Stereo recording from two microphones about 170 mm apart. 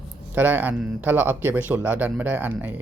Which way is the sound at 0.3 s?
10° right (ahead or behind).